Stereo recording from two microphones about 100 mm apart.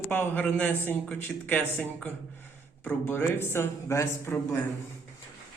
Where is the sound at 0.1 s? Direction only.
20° left (ahead or behind).